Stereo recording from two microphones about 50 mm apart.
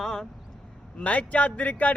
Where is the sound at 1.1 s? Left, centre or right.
Left.